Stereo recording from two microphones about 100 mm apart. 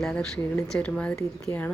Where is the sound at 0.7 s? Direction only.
10° left (ahead or behind).